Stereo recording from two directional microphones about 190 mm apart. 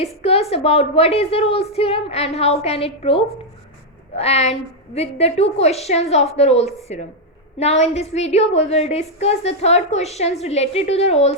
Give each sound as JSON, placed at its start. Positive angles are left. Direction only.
{"t": 0.0, "sound": "a woman's voice", "side_deg": 35}